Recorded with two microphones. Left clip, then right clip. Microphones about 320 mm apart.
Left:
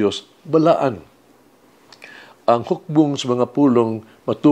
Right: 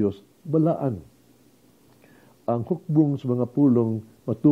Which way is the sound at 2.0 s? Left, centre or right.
Centre.